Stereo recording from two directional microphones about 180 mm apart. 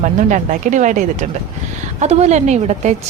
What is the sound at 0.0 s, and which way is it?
A woman's voice, 45° right (ahead or behind).